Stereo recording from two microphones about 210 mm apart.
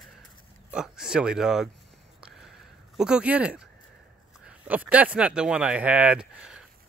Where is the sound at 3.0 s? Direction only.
5° right (ahead or behind).